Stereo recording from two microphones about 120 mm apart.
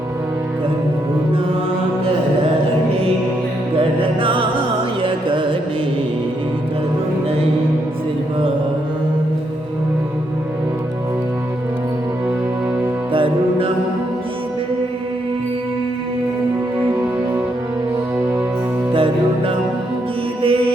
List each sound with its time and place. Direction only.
3.8 s music: 45° right (ahead or behind)
13.1 s music: 45° right (ahead or behind)
18.9 s music: 45° right (ahead or behind)